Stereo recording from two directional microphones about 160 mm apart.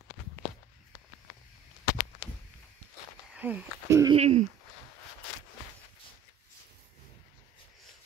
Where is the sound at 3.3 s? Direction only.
10° right (ahead or behind).